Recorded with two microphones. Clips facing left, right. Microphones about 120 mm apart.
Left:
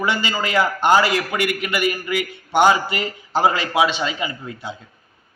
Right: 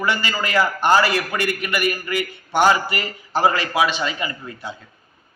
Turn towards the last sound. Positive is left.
turn(degrees=15)  # may be behind; listen again after turning